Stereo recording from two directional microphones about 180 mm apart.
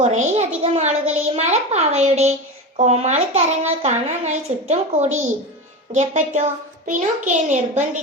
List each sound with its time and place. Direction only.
0.0 s a sound: 40° right (ahead or behind)
1.1 s child singing: 40° right (ahead or behind)
2.7 s a child's voice: 35° right (ahead or behind)